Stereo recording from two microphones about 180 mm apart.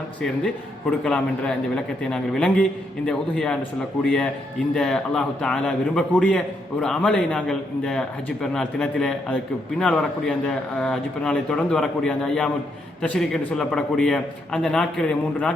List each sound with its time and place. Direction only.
0.2 s a man's voice: 5° left (ahead or behind)